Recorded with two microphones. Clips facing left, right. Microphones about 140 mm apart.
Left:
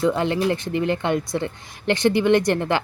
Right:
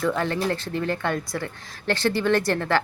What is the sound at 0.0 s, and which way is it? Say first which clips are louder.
Speech: left 4 dB; 15° left (ahead or behind).